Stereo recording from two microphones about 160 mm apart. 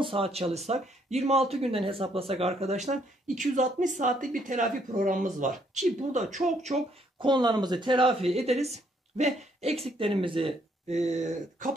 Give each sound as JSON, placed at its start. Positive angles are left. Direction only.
{"t": 0.0, "sound": "speech", "side_deg": -35}
{"t": 6.7, "sound": "speech", "side_deg": -40}
{"t": 7.2, "sound": "a woman's voice", "side_deg": -30}